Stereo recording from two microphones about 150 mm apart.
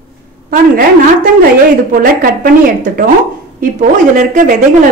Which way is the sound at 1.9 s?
70° right (ahead or behind).